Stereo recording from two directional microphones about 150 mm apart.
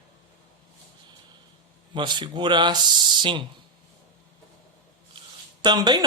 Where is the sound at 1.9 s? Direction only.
30° right (ahead or behind).